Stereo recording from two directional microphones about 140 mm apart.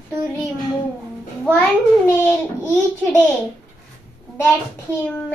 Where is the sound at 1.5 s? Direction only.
10° left (ahead or behind).